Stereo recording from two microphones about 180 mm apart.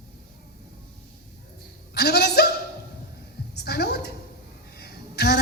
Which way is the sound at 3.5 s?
65° left (ahead or behind).